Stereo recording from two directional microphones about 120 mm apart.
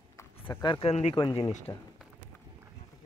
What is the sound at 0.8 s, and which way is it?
Speech, 60° left (ahead or behind).